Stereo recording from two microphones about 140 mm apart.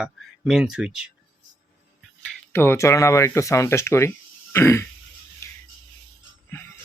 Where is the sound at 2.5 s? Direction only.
15° left (ahead or behind).